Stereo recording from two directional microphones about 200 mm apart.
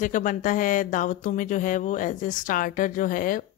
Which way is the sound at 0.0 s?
40° left (ahead or behind).